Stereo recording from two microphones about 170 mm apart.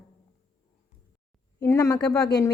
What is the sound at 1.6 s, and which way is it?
Speech, 20° left (ahead or behind).